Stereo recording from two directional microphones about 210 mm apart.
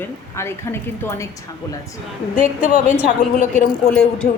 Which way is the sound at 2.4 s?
35° left (ahead or behind).